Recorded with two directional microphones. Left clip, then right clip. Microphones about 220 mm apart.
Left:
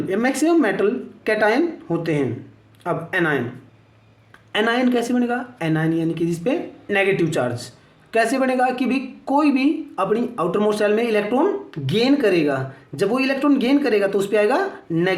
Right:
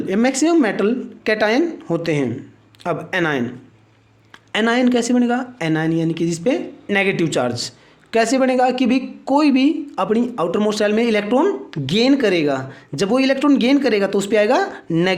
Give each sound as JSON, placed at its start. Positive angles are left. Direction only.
{"t": 0.1, "sound": "speech", "side_deg": -40}
{"t": 4.5, "sound": "speech", "side_deg": -40}